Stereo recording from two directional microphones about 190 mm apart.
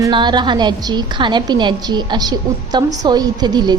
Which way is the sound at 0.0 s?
25° right (ahead or behind).